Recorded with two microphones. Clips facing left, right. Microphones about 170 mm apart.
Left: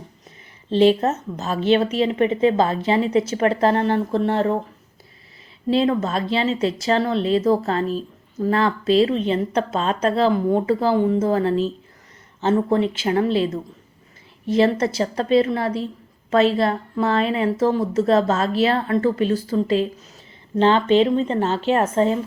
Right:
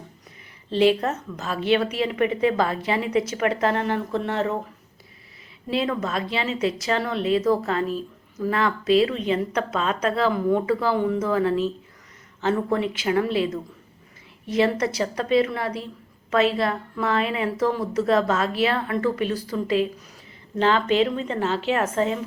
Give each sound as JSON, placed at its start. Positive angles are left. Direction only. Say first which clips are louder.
{"t": 0.7, "sound": "speech", "louder": "left 4 dB", "side_deg": 25}
{"t": 5.6, "sound": "a woman's voice", "louder": "left 6 dB", "side_deg": 30}